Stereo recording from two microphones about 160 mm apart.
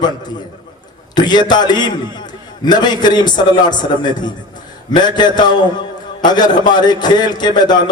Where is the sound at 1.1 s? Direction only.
25° left (ahead or behind).